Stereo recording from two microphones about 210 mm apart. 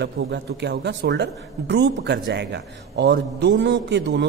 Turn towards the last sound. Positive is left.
turn(degrees=-55)  # may be behind; listen again after turning